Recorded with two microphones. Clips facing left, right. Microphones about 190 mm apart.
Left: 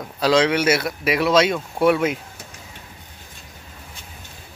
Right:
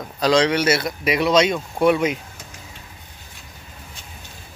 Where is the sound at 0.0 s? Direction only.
5° left (ahead or behind).